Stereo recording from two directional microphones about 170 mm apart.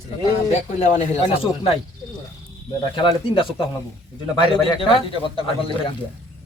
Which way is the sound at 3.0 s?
30° left (ahead or behind).